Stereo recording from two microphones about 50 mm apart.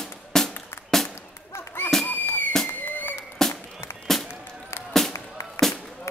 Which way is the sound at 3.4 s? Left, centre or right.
Centre.